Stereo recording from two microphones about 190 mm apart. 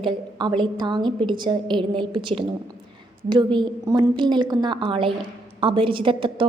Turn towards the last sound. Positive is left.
turn(degrees=-25)  # may be behind; listen again after turning